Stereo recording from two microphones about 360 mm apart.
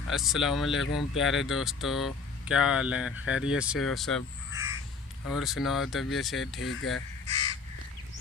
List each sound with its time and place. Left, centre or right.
0.1 s speech: centre
5.3 s speech: centre
7.3 s crow: centre